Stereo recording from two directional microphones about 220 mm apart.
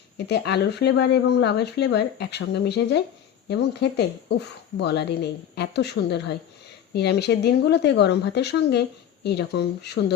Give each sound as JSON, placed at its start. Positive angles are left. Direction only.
{"t": 0.3, "sound": "speech", "side_deg": 50}